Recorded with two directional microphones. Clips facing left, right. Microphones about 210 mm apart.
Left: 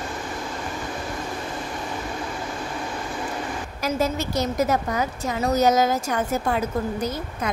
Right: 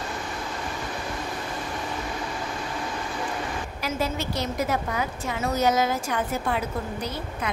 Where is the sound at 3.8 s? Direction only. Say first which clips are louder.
Left 5 dB; 45° left (ahead or behind).